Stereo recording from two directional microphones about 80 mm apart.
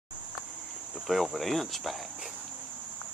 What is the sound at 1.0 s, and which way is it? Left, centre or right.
Speech, centre.